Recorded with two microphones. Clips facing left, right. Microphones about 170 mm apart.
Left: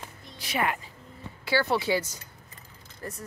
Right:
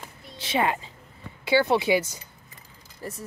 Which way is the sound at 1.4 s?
20° right (ahead or behind).